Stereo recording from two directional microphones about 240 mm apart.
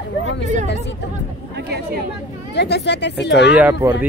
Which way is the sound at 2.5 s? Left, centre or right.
Left.